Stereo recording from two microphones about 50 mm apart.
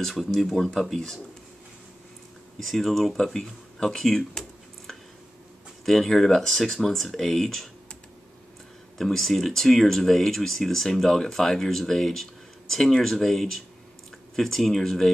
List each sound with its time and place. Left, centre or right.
0.0 s speech: centre
2.6 s speech: centre
5.9 s speech: centre
8.9 s speech: centre